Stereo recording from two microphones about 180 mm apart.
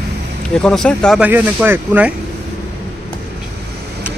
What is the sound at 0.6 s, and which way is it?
Speech, 5° left (ahead or behind).